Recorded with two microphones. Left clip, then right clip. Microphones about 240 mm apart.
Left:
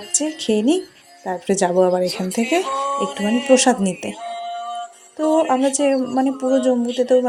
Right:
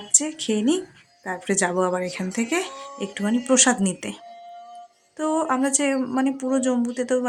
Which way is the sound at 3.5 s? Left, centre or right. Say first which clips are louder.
Left 5 dB; centre.